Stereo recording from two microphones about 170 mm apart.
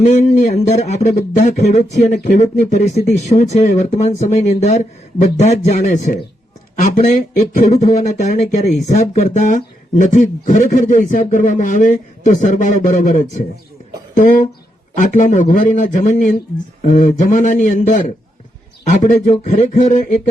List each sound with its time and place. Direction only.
0.0 s speech: 45° left (ahead or behind)
7.5 s speech: 45° left (ahead or behind)